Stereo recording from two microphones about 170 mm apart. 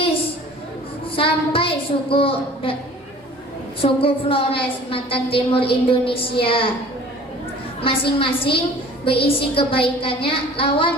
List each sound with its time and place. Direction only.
1.1 s a woman's voice: 30° left (ahead or behind)
3.8 s a woman's voice: 30° left (ahead or behind)
7.8 s a woman's voice: 30° left (ahead or behind)